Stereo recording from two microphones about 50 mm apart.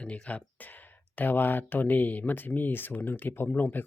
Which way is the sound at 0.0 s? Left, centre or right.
Left.